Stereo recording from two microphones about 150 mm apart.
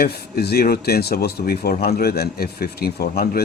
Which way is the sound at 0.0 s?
90° left.